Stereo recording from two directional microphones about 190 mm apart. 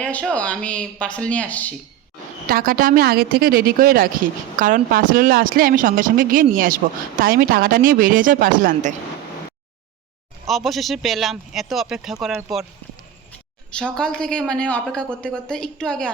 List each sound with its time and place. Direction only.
0.0 s speech: 5° left (ahead or behind)
2.5 s a woman's voice: 50° right (ahead or behind)
10.4 s speech: centre (ahead or behind)
13.7 s speech: 5° left (ahead or behind)